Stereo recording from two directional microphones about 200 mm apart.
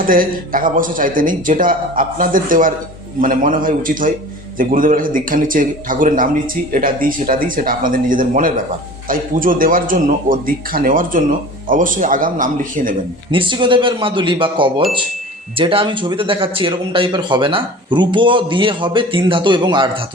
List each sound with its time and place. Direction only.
0.0 s a man's voice: 45° right (ahead or behind)
13.3 s speech: 25° right (ahead or behind)